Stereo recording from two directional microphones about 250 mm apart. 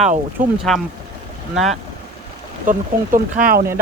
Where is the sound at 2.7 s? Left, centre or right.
Right.